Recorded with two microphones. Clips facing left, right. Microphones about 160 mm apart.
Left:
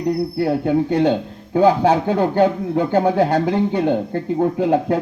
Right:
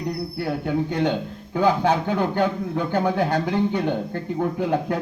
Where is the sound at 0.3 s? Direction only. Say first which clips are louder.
Left 5 dB; 30° left (ahead or behind).